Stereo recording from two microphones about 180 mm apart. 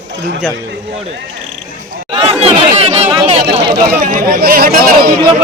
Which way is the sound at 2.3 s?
35° right (ahead or behind).